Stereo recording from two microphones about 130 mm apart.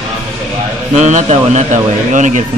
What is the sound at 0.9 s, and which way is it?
Speech, 65° right (ahead or behind).